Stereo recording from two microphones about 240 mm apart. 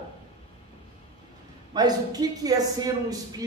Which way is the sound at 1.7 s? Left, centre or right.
Centre.